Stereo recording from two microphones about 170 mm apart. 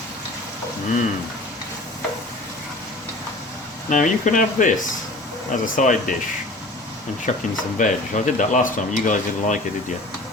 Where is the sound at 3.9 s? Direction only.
45° left (ahead or behind).